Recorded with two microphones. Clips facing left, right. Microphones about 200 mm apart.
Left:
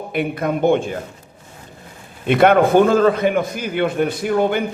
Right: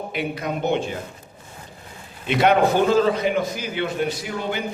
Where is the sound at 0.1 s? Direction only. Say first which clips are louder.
Left 8 dB; 55° left (ahead or behind).